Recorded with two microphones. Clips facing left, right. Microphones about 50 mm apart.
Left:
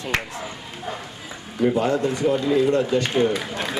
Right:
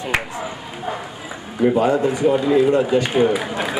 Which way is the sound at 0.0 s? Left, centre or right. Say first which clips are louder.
Right 3 dB; centre.